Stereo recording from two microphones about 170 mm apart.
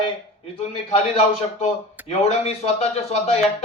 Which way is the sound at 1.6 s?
40° left (ahead or behind).